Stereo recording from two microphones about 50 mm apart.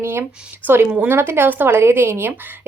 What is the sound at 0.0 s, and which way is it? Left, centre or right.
A woman's voice, right.